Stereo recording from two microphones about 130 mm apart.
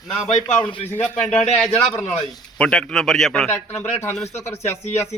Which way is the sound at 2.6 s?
5° left (ahead or behind).